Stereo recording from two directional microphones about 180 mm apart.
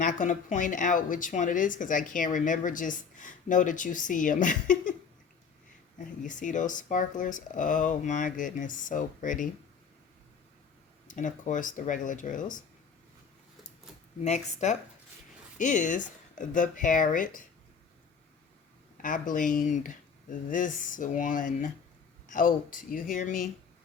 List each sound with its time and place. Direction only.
0.0 s speech: 45° left (ahead or behind)
6.2 s speech: 45° left (ahead or behind)
11.1 s speech: 45° left (ahead or behind)
14.3 s speech: 40° left (ahead or behind)
19.0 s speech: 50° left (ahead or behind)